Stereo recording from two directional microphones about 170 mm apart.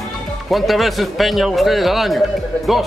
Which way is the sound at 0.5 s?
Centre (ahead or behind).